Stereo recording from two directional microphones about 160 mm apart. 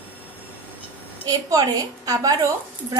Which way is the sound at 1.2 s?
20° right (ahead or behind).